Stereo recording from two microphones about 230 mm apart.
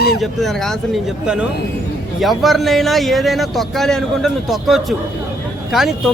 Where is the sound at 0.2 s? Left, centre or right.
Centre.